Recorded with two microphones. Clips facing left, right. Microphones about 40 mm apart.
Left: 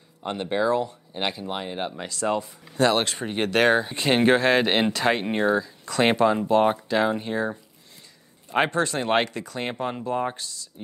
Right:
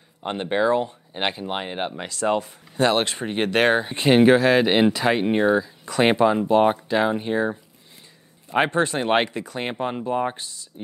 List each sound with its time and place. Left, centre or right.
0.2 s speech: right
2.3 s speech: right
2.8 s speech: right
4.1 s speech: centre; by 7.5 s right
8.6 s speech: right
10.3 s speech: right